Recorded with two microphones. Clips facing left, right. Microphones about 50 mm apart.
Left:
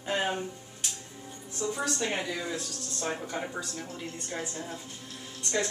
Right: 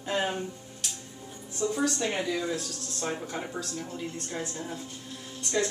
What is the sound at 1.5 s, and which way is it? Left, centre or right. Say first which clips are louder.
Speech: right 3 dB; centre.